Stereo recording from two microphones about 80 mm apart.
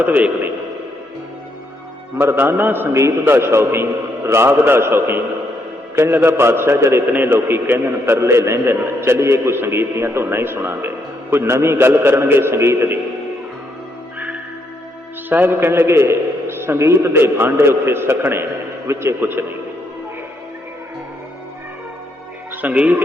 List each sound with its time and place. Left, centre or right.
0.0 s a man's voice: centre
2.1 s a man's voice: right
15.3 s a man's voice: right
22.6 s a man's voice: centre